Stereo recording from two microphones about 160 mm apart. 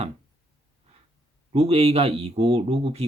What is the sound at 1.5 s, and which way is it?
Speech, 40° right (ahead or behind).